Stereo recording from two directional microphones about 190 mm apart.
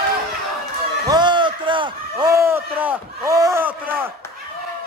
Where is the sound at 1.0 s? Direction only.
20° right (ahead or behind).